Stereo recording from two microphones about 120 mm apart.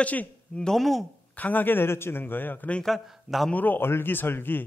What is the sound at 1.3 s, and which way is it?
A man's voice, 15° left (ahead or behind).